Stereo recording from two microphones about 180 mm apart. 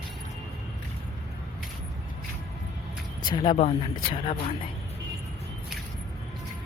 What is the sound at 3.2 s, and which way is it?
A woman's voice, 25° left (ahead or behind).